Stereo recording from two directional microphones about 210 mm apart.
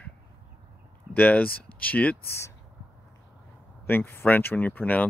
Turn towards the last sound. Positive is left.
turn(degrees=10)  # may be behind; listen again after turning